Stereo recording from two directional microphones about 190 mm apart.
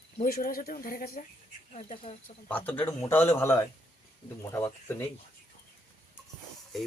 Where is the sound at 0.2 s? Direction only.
50° left (ahead or behind).